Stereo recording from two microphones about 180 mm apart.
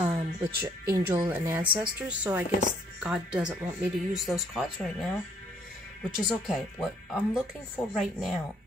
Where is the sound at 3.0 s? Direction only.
5° right (ahead or behind).